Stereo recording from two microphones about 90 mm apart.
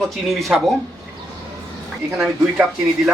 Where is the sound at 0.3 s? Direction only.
Centre (ahead or behind).